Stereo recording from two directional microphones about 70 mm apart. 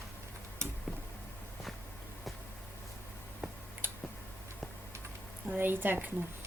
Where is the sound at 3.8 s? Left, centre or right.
Right.